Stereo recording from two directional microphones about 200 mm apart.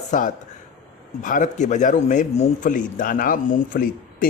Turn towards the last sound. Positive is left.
turn(degrees=45)  # may be behind; listen again after turning